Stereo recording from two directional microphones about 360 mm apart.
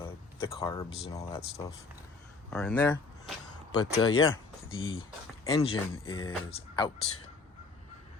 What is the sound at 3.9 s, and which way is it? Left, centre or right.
Speech, left.